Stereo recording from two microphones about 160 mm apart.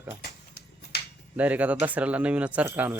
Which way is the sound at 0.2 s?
90° left.